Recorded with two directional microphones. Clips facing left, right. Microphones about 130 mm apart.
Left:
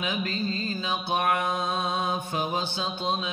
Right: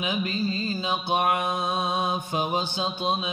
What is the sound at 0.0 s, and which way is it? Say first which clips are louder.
Mantra: right 2 dB; 15° right (ahead or behind).